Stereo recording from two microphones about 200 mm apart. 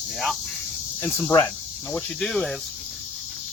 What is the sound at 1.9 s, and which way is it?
Cricket, centre (ahead or behind).